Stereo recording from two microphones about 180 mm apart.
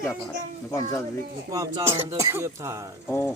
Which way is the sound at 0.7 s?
20° left (ahead or behind).